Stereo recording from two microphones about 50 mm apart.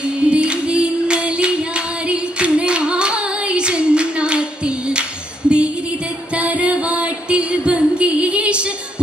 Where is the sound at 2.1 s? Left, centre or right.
Right.